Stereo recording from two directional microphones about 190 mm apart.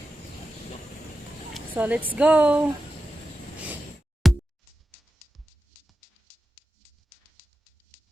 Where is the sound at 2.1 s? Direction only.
5° right (ahead or behind).